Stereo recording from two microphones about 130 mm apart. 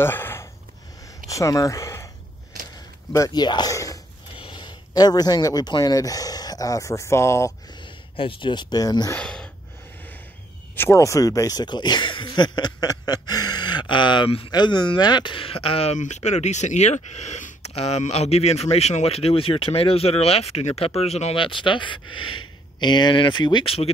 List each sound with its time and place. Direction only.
0.0 s a sound: 15° left (ahead or behind)
1.3 s speech: 25° left (ahead or behind)
3.1 s speech: 30° left (ahead or behind)
4.4 s speech: 40° left (ahead or behind); by 7.5 s 20° left (ahead or behind)
7.8 s speech: 40° left (ahead or behind)
9.1 s a sound: 5° left (ahead or behind)
10.8 s speech: 20° left (ahead or behind); by 14.5 s 45° left (ahead or behind)
14.5 s speech: 35° left (ahead or behind); by 16.0 s 50° left (ahead or behind)
16.0 s speech: 60° left (ahead or behind); by 23.9 s 45° left (ahead or behind)